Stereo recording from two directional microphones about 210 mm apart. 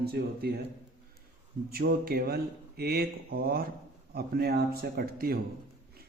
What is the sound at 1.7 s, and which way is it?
A man's voice, 45° right (ahead or behind).